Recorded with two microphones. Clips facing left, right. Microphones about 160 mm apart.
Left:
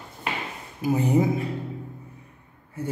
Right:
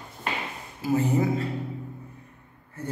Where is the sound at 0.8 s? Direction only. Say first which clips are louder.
Left 2 dB; 15° left (ahead or behind).